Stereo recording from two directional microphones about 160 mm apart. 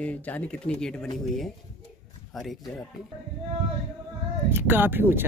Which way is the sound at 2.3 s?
Centre (ahead or behind).